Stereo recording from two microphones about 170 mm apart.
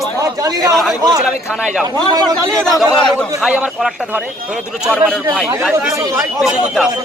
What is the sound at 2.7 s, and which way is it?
A man's voice, centre (ahead or behind).